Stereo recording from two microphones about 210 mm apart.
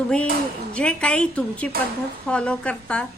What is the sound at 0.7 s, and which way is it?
Speech, 5° left (ahead or behind).